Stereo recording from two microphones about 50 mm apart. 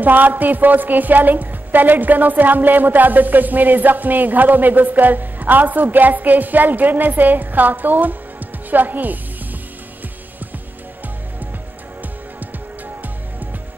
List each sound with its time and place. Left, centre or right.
0.0 s a woman's voice: right